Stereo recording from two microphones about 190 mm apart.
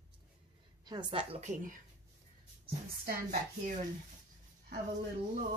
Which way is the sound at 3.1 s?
50° right (ahead or behind).